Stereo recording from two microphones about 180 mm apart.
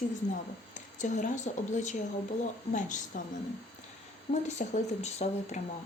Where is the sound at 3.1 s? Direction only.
45° left (ahead or behind).